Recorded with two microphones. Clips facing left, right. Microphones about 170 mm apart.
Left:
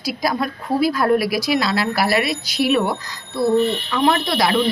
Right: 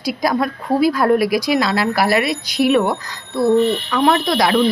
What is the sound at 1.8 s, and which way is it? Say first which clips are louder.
Speech: right 2 dB; 45° right (ahead or behind).